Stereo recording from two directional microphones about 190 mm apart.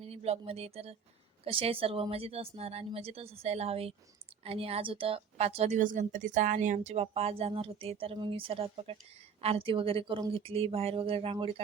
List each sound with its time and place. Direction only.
0.0 s a woman's voice: 30° right (ahead or behind)